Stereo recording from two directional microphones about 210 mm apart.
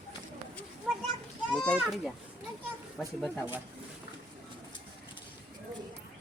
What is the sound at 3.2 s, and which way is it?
Speech, 5° left (ahead or behind).